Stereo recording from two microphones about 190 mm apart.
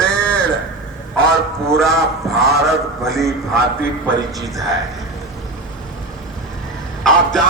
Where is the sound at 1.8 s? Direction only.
Centre (ahead or behind).